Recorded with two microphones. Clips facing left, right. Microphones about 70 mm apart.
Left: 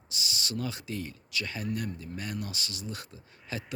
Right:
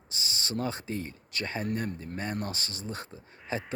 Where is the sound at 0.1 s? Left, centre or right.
Right.